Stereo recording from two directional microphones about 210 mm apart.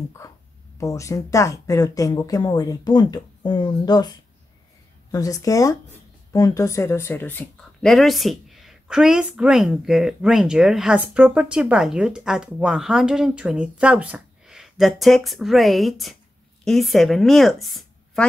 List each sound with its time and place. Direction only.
0.7 s speech: 15° left (ahead or behind)
5.1 s a woman's voice: 15° left (ahead or behind); by 18.2 s centre (ahead or behind)